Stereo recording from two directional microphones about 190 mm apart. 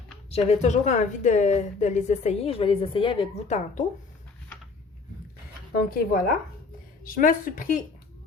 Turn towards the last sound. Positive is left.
turn(degrees=45)  # may be behind; listen again after turning